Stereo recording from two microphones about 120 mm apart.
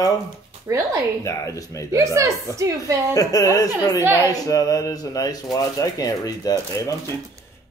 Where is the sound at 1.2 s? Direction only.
25° left (ahead or behind).